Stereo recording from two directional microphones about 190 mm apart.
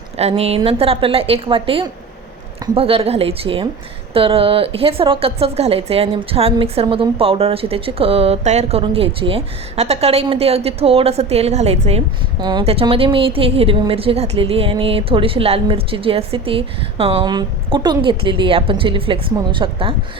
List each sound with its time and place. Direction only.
0.2 s a woman's voice: 35° right (ahead or behind)